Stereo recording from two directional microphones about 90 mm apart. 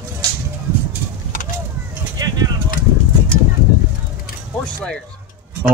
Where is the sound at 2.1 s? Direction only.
45° right (ahead or behind).